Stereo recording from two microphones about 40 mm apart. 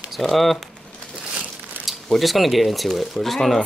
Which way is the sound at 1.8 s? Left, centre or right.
Right.